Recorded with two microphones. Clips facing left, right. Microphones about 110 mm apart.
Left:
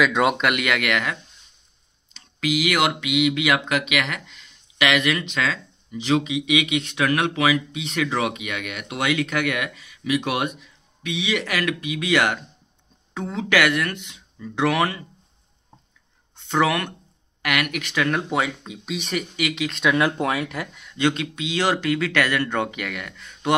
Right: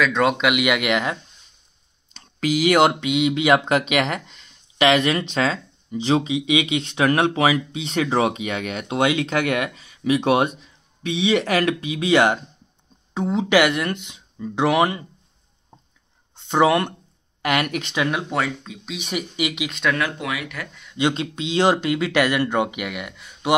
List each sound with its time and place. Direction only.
0.0 s speech: 5° left (ahead or behind); by 1.1 s 20° right (ahead or behind)
2.1 s speech: 35° right (ahead or behind); by 15.0 s 20° right (ahead or behind)
16.3 s speech: 20° right (ahead or behind)
18.3 s speech: 15° left (ahead or behind)
18.9 s speech: 5° right (ahead or behind)
19.1 s speech: 20° right (ahead or behind)
20.0 s speech: 35° left (ahead or behind)
20.9 s speech: 20° right (ahead or behind)